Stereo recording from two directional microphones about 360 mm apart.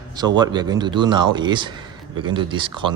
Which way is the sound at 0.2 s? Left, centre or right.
Centre.